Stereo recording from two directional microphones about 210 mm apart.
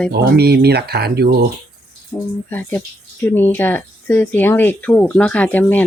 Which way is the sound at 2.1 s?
10° left (ahead or behind).